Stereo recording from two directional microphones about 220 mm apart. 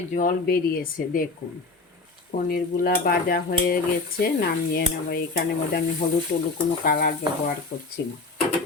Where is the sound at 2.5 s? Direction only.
45° left (ahead or behind).